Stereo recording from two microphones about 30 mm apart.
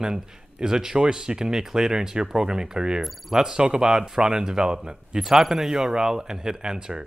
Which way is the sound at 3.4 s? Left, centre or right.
Right.